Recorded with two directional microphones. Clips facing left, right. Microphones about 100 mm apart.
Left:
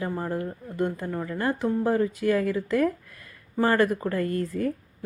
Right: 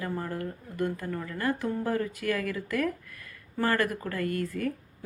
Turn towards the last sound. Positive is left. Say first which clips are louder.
# left 3 dB
turn(degrees=25)  # may be behind; listen again after turning